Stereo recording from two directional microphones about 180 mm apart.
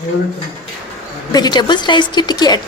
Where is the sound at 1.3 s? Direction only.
25° left (ahead or behind).